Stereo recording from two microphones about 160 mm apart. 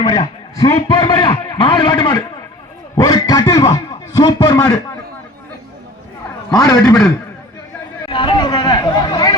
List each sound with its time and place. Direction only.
0.0 s a man's voice: 25° left (ahead or behind)
6.5 s a man's voice: 25° left (ahead or behind)
8.1 s a man's voice: 30° left (ahead or behind)